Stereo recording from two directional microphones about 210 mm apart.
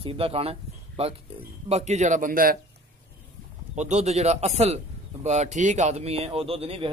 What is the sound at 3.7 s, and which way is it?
Speech, 35° right (ahead or behind).